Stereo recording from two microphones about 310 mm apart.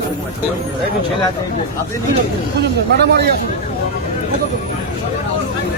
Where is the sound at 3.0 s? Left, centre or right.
Right.